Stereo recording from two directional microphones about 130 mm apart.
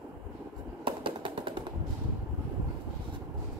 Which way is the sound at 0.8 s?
40° right (ahead or behind).